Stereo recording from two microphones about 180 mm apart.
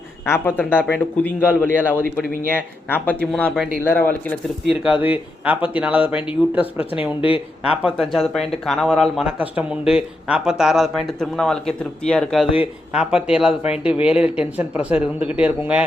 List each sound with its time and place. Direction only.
0.3 s a man's voice: 10° left (ahead or behind)
4.7 s speech: 5° right (ahead or behind)
7.2 s speech: 30° left (ahead or behind)
7.7 s speech: 5° right (ahead or behind)